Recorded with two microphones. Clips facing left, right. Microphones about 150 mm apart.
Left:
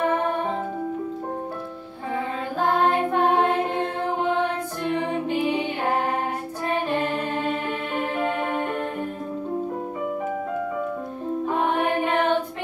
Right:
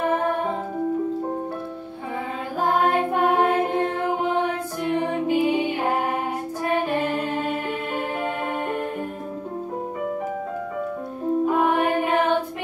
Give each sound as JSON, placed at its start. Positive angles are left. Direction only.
{"t": 3.1, "sound": "mantra", "side_deg": -10}
{"t": 4.8, "sound": "music", "side_deg": -5}
{"t": 11.5, "sound": "mantra", "side_deg": -10}